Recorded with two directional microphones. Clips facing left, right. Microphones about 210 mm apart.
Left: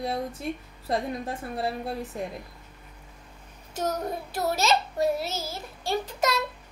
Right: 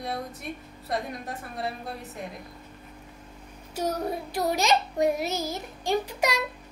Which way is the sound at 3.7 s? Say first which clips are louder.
Right 1 dB; 10° right (ahead or behind).